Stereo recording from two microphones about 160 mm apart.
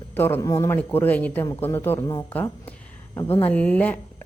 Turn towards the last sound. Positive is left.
turn(degrees=10)  # may be behind; listen again after turning